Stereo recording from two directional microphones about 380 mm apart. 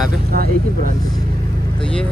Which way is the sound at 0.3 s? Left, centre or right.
Right.